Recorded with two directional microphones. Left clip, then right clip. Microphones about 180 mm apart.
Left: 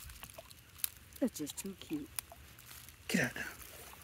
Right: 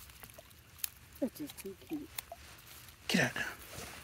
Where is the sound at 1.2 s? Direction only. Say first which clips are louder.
Left 1 dB; 90° left.